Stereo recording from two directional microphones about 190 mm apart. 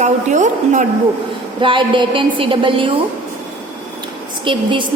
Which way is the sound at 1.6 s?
25° right (ahead or behind).